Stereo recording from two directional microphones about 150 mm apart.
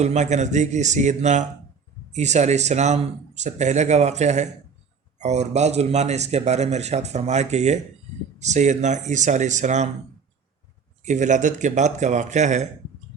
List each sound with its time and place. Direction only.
0.0 s a man's voice: 50° right (ahead or behind)
11.0 s a man's voice: 55° right (ahead or behind)